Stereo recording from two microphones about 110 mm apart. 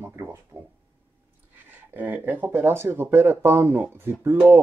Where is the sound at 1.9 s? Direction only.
15° right (ahead or behind).